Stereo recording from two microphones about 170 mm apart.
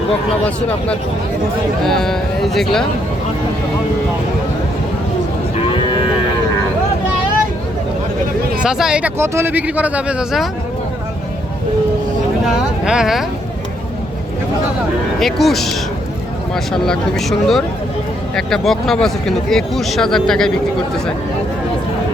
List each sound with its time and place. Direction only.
1.9 s speech: centre (ahead or behind)
5.7 s moo: 30° left (ahead or behind)
8.6 s speech: 5° right (ahead or behind)
12.8 s speech: 5° right (ahead or behind)
15.2 s speech: centre (ahead or behind)
16.7 s speech: 5° left (ahead or behind)